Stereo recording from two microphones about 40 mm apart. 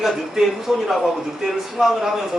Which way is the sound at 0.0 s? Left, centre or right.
Centre.